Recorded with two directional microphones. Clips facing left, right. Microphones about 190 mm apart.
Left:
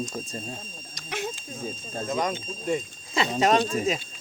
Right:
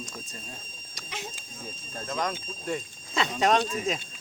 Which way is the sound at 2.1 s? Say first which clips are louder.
Left 3 dB; 15° left (ahead or behind).